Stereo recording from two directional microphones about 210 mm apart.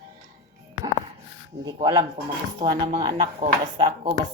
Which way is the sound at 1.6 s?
15° right (ahead or behind).